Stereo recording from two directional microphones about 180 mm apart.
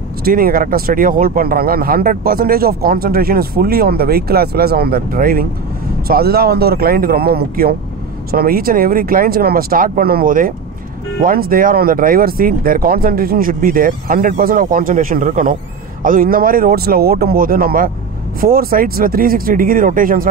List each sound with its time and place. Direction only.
0.2 s speech: 55° right (ahead or behind)